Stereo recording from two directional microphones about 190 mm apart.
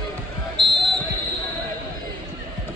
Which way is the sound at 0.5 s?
25° right (ahead or behind).